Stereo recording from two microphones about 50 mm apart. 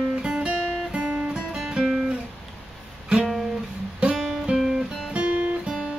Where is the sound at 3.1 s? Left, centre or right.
Centre.